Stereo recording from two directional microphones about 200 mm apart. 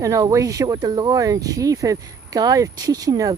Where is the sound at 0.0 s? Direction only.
15° right (ahead or behind).